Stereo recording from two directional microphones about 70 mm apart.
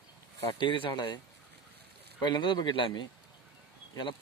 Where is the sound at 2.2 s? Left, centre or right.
Left.